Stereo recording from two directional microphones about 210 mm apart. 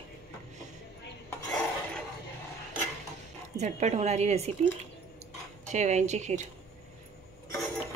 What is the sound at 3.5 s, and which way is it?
Speech, 35° right (ahead or behind).